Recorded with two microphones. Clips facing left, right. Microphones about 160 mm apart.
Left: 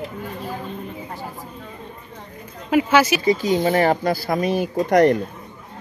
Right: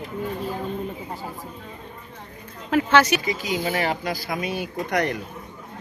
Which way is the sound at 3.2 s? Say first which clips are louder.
Left 8 dB; 40° left (ahead or behind).